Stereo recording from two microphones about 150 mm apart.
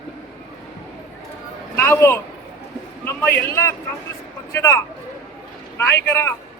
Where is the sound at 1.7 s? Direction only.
15° left (ahead or behind).